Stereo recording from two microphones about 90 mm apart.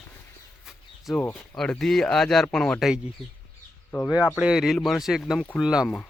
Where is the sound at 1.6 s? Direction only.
5° left (ahead or behind).